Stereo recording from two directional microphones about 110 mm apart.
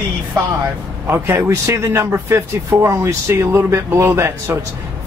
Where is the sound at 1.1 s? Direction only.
25° right (ahead or behind).